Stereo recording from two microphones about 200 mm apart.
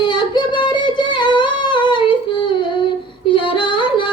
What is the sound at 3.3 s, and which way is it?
Female singing, 25° left (ahead or behind).